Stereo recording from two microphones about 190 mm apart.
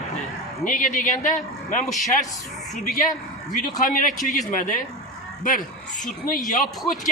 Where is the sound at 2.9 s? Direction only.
40° left (ahead or behind).